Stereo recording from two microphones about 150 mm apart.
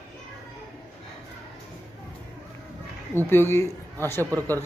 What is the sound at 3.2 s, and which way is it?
Speech, 15° left (ahead or behind).